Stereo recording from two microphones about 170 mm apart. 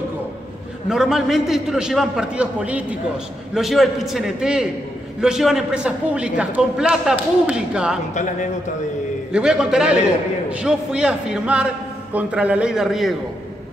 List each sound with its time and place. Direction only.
0.8 s a man's voice: centre (ahead or behind)
8.1 s a man's voice: 45° left (ahead or behind)
9.3 s a man's voice: 5° right (ahead or behind)